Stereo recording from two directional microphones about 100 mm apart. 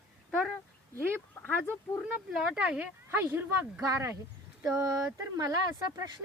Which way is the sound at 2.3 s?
5° right (ahead or behind).